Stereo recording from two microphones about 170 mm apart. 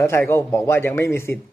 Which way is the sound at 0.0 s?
15° left (ahead or behind).